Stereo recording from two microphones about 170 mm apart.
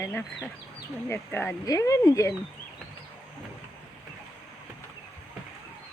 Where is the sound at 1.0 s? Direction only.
10° left (ahead or behind).